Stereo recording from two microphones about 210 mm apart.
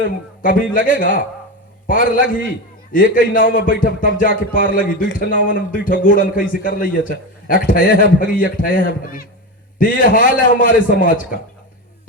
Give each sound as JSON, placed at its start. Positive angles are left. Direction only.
{"t": 0.0, "sound": "a man's voice", "side_deg": 40}